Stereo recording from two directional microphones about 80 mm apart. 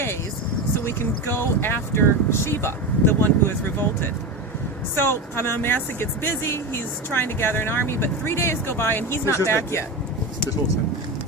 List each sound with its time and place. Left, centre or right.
0.9 s speech: left